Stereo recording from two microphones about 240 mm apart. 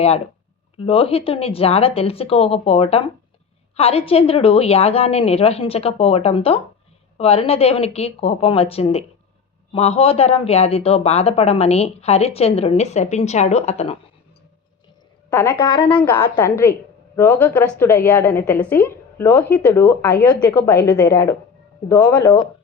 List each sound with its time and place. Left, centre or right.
0.8 s a man's voice: left
15.3 s a woman's voice: centre
15.5 s a man's voice: centre